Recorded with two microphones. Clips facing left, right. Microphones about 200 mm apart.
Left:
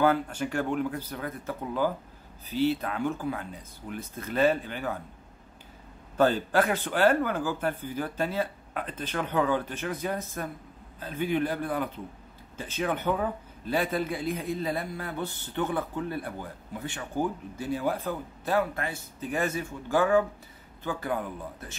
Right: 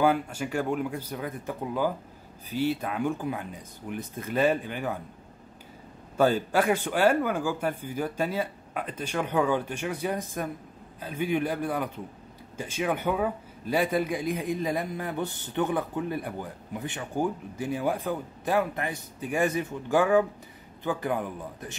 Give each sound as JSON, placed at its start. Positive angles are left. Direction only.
{"t": 0.0, "sound": "speech", "side_deg": -10}
{"t": 6.1, "sound": "speech", "side_deg": -10}